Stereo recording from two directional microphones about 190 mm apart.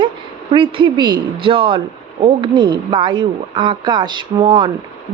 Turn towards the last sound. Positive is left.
turn(degrees=-25)  # may be behind; listen again after turning